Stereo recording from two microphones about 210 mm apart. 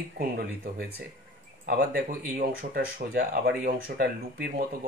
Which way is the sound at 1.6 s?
45° right (ahead or behind).